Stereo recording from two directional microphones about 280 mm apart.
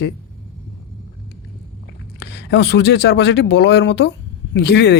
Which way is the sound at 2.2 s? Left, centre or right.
Left.